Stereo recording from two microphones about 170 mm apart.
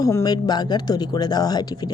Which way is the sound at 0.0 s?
20° left (ahead or behind).